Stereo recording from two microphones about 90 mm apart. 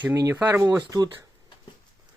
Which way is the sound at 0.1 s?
40° right (ahead or behind).